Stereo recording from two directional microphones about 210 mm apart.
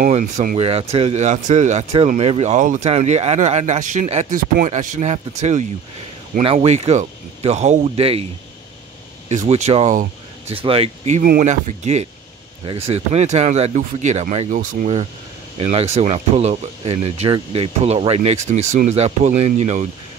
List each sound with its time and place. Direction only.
0.0 s speech: 40° right (ahead or behind)
9.3 s speech: 35° right (ahead or behind)